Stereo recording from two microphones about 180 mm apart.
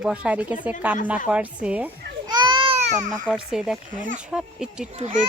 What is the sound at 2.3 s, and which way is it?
Baby cry, 25° right (ahead or behind).